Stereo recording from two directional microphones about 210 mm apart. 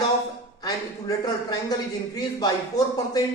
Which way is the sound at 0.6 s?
20° left (ahead or behind).